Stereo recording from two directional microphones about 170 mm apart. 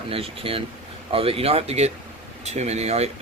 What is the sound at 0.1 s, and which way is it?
Speech, 35° right (ahead or behind).